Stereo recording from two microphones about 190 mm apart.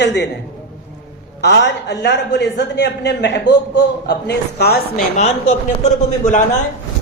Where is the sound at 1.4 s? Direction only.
65° left (ahead or behind).